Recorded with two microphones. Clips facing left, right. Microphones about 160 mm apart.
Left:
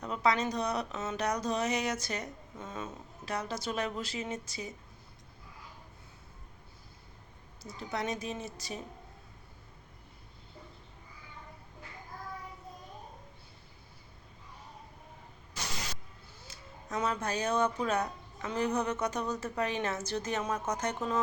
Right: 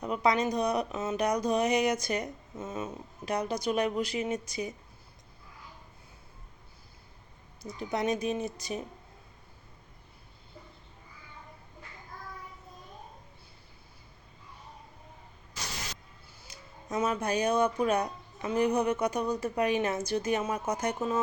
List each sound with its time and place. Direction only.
0.0 s speech: 15° right (ahead or behind)
7.6 s speech: 15° right (ahead or behind)
16.4 s speech: 10° right (ahead or behind)